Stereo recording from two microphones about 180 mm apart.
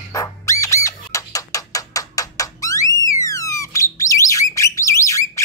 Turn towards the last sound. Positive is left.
turn(degrees=15)  # may be behind; listen again after turning